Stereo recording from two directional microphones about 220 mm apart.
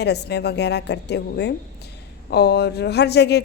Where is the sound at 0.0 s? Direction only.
50° left (ahead or behind).